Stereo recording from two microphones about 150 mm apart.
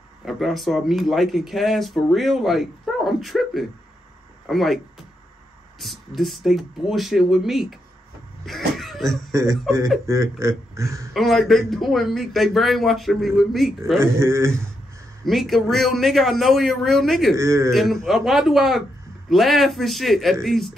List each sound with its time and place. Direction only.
0.2 s speech: centre (ahead or behind)
5.8 s speech: centre (ahead or behind)
8.5 s a sound: centre (ahead or behind)
9.3 s speech: 20° right (ahead or behind)
11.1 s speech: centre (ahead or behind)
14.0 s a man's voice: 15° right (ahead or behind)
15.2 s speech: centre (ahead or behind)
17.4 s speech: 20° right (ahead or behind)
17.6 s speech: centre (ahead or behind)